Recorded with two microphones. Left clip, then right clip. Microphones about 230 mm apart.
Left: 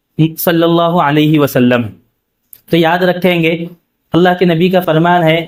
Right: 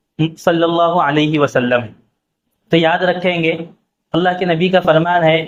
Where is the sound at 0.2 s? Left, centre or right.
Left.